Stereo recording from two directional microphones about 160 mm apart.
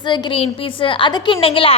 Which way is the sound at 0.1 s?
35° left (ahead or behind).